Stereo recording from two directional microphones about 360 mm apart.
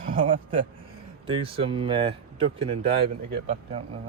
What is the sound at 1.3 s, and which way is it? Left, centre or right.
Speech, centre.